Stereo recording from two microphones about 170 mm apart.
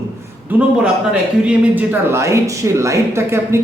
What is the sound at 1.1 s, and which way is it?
A man's voice, 10° right (ahead or behind).